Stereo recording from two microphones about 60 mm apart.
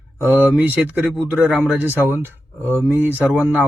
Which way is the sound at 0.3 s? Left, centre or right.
Right.